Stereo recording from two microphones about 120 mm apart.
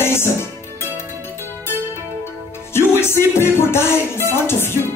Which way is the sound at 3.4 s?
20° left (ahead or behind).